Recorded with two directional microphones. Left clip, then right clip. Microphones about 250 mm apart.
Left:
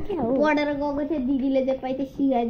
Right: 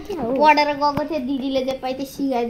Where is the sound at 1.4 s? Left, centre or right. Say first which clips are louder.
Even; centre.